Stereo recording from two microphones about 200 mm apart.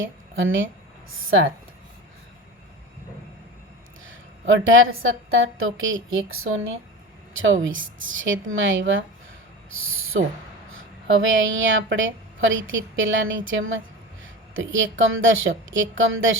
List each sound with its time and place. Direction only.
0.0 s a woman's voice: 70° right (ahead or behind)
4.0 s a woman's voice: 70° right (ahead or behind); by 6.7 s 90° right
7.3 s a woman's voice: 75° right (ahead or behind)
9.6 s speech: 85° right
11.3 s a woman's voice: 70° right (ahead or behind)